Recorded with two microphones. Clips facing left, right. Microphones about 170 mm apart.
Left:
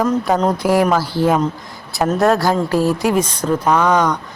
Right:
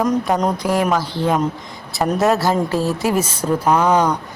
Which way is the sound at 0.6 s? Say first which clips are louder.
Left 3 dB; 10° left (ahead or behind).